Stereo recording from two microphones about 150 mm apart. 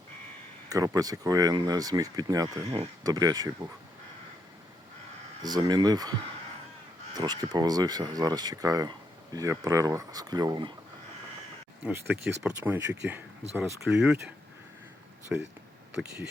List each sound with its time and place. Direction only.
0.7 s speech: 25° right (ahead or behind)
2.6 s speech: 40° right (ahead or behind)
3.0 s speech: 25° right (ahead or behind)
5.4 s speech: 25° right (ahead or behind)
11.8 s speech: 15° right (ahead or behind)
15.3 s speech: 10° right (ahead or behind)